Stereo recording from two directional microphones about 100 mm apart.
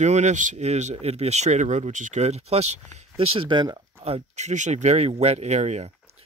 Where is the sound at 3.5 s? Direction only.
50° right (ahead or behind).